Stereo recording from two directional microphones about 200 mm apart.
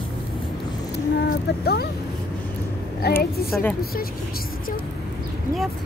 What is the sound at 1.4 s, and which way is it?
Speech, 55° left (ahead or behind).